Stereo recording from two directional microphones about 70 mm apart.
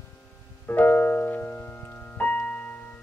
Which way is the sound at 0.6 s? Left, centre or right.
Left.